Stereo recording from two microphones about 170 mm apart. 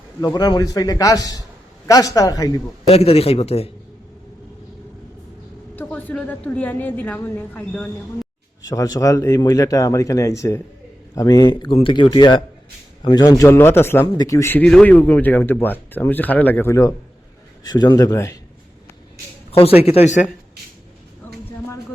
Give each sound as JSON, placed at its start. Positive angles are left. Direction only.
{"t": 0.3, "sound": "speech", "side_deg": 25}
{"t": 2.8, "sound": "a man's voice", "side_deg": 35}
{"t": 5.7, "sound": "speech", "side_deg": 10}
{"t": 8.6, "sound": "speech", "side_deg": 20}
{"t": 19.5, "sound": "a man's voice", "side_deg": 35}